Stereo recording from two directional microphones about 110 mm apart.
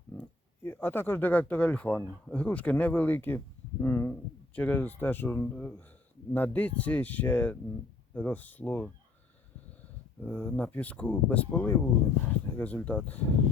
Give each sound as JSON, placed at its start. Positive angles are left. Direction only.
{"t": 0.6, "sound": "speech", "side_deg": 20}
{"t": 10.2, "sound": "speech", "side_deg": 15}